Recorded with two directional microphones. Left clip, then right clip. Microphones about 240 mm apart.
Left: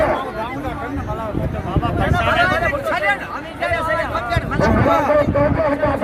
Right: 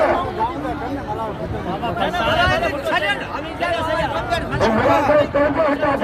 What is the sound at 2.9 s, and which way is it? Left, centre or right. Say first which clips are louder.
Chatter: left 1 dB; centre.